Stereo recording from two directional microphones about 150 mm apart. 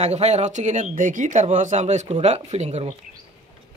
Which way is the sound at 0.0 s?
45° right (ahead or behind).